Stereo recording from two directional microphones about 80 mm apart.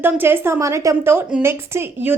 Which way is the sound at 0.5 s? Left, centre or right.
Right.